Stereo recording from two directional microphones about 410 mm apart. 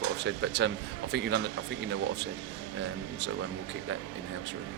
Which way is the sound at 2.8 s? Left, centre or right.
Right.